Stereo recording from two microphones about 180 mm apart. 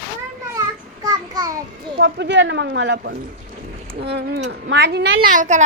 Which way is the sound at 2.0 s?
70° right (ahead or behind).